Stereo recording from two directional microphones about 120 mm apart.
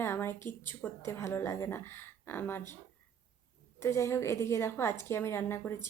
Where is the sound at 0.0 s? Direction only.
20° left (ahead or behind).